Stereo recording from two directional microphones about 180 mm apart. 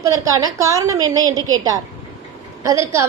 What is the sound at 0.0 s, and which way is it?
A woman's voice, 20° right (ahead or behind).